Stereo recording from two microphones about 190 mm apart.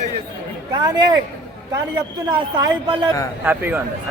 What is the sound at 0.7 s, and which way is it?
Speech, 20° right (ahead or behind).